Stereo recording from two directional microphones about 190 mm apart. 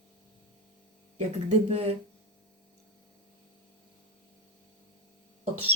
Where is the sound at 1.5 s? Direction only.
35° right (ahead or behind).